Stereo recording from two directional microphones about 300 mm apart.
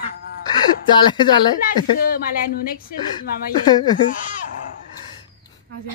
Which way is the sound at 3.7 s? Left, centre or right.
Centre.